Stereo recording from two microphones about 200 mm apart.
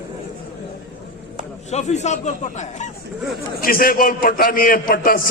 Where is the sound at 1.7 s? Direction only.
35° left (ahead or behind).